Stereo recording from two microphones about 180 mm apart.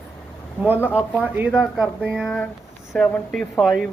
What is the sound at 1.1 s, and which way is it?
Speech, 10° right (ahead or behind).